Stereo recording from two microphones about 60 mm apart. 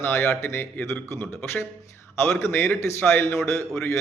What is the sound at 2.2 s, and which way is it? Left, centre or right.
A man's voice, left.